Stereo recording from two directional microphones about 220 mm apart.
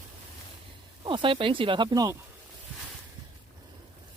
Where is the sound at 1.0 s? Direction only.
20° right (ahead or behind).